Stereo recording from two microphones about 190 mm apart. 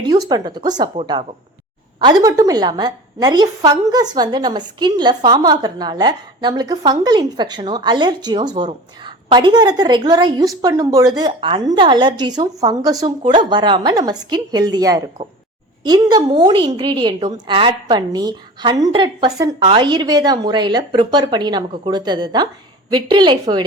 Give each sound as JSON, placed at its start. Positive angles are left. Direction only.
{"t": 0.1, "sound": "a woman's voice", "side_deg": -20}
{"t": 2.0, "sound": "a woman's voice", "side_deg": -20}